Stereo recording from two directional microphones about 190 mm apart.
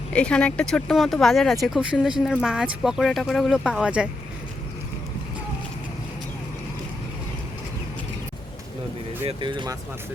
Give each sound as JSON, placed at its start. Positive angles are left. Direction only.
{"t": 0.1, "sound": "speech", "side_deg": 5}
{"t": 9.2, "sound": "speech", "side_deg": -25}